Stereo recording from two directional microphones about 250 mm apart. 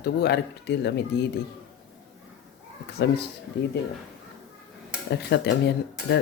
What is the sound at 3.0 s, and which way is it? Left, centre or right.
Speech, left.